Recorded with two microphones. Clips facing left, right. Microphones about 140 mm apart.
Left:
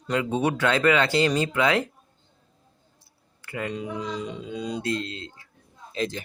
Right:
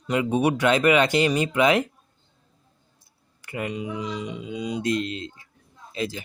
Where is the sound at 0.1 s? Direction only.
15° right (ahead or behind).